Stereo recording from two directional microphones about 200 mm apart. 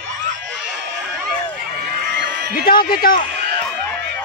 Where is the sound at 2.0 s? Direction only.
55° right (ahead or behind).